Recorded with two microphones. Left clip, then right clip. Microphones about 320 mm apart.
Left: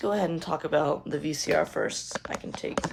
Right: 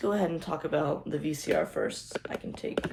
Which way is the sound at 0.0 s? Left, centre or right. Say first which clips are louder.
Left 2 dB; left.